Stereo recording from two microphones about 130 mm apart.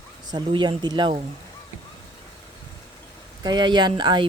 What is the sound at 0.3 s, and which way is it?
Speech, 35° right (ahead or behind).